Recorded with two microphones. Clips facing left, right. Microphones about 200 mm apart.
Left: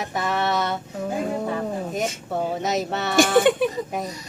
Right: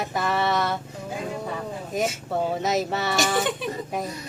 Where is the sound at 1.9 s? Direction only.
Centre (ahead or behind).